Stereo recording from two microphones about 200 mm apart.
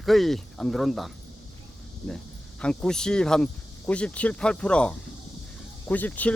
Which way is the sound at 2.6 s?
5° left (ahead or behind).